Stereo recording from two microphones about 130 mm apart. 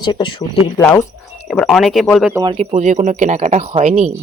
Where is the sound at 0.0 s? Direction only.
35° left (ahead or behind).